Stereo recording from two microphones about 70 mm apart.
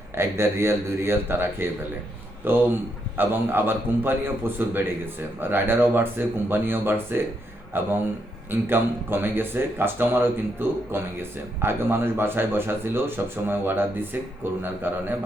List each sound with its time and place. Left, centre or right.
0.2 s a man's voice: right